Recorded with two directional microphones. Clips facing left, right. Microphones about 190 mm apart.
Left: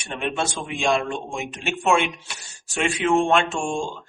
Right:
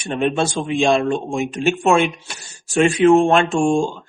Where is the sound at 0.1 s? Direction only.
35° right (ahead or behind).